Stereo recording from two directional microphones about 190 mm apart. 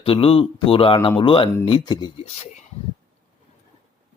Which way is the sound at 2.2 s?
35° left (ahead or behind).